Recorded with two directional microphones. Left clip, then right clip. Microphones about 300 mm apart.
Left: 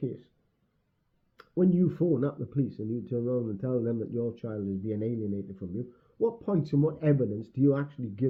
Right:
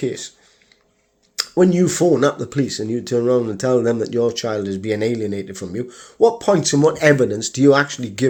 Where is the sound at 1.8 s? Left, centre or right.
Centre.